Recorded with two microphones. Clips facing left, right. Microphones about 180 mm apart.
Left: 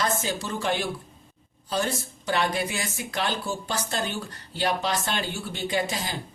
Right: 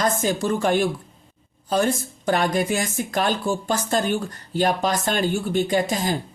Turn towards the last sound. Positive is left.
turn(degrees=-45)  # may be behind; listen again after turning